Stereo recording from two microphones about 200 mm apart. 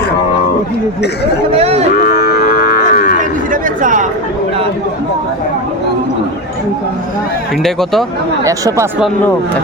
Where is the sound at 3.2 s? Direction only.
40° right (ahead or behind).